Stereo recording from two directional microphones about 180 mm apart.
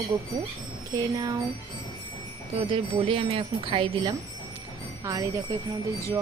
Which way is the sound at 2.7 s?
30° right (ahead or behind).